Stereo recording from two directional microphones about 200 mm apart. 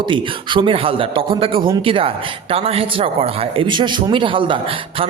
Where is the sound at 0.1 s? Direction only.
25° right (ahead or behind).